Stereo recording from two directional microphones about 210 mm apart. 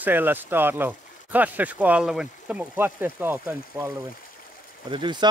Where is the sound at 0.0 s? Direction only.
10° right (ahead or behind).